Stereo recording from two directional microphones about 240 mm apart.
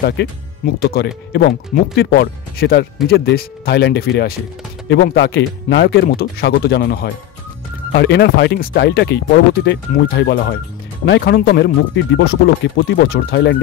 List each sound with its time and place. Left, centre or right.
0.8 s speech: left